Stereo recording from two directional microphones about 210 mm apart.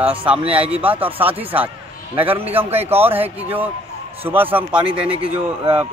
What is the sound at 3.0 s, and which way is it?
Speech, 10° right (ahead or behind).